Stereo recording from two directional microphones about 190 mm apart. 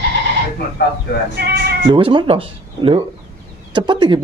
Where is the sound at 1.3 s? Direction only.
55° right (ahead or behind).